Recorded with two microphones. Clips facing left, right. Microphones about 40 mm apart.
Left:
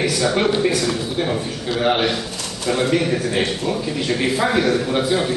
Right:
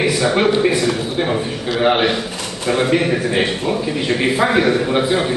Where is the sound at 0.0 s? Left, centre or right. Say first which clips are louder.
Right 3 dB; right.